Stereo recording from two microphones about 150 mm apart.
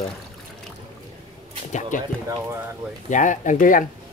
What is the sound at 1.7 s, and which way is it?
Speech, 55° left (ahead or behind).